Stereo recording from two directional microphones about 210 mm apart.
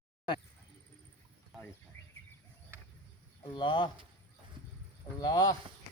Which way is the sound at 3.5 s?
25° left (ahead or behind).